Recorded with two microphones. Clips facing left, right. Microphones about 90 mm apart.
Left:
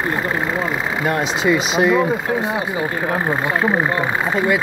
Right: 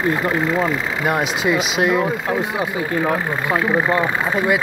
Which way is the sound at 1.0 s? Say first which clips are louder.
Left 1 dB; 5° right (ahead or behind).